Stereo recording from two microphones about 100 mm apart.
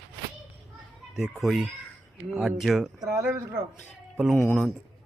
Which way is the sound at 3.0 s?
35° right (ahead or behind).